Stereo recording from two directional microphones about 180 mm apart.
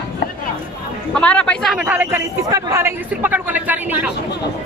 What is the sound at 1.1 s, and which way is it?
A man's voice, 5° left (ahead or behind).